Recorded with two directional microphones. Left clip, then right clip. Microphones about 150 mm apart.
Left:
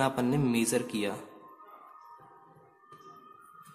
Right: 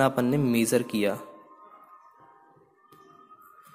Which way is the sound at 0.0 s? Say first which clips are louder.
Right 5 dB; 30° right (ahead or behind).